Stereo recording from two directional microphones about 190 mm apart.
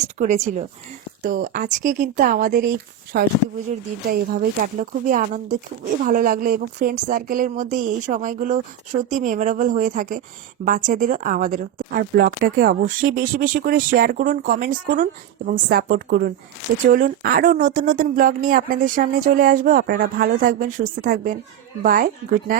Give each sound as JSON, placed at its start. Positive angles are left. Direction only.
{"t": 0.0, "sound": "speech", "side_deg": -35}